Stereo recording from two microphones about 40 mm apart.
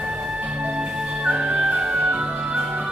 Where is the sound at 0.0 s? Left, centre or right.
Right.